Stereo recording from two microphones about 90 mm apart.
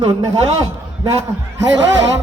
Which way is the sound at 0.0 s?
55° right (ahead or behind).